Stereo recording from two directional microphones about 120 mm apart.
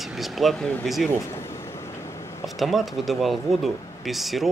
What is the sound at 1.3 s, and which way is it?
Vehicle, 20° left (ahead or behind).